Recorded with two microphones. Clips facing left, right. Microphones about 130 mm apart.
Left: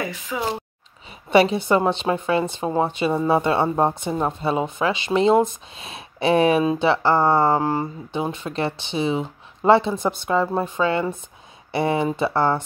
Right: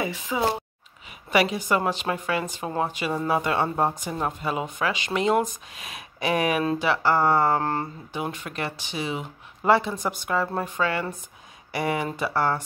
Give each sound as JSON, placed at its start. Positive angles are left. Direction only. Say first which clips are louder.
{"t": 0.3, "sound": "speech", "louder": "right 2 dB", "side_deg": -15}
{"t": 1.3, "sound": "speech", "louder": "left 6 dB", "side_deg": 30}
{"t": 7.6, "sound": "speech", "louder": "left 4 dB", "side_deg": 10}
{"t": 8.1, "sound": "speech", "louder": "left 5 dB", "side_deg": 25}